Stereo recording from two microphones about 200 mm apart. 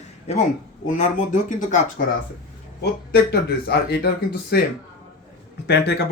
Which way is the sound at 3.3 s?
55° left (ahead or behind).